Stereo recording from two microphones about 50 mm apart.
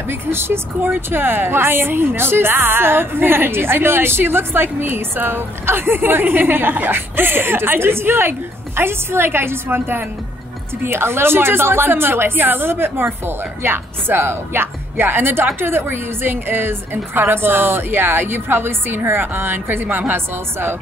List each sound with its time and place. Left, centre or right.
0.1 s a woman's voice: right